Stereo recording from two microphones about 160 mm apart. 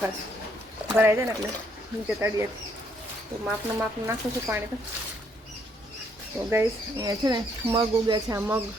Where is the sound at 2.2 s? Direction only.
20° right (ahead or behind).